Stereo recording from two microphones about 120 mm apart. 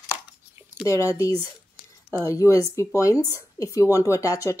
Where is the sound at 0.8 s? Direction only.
25° left (ahead or behind).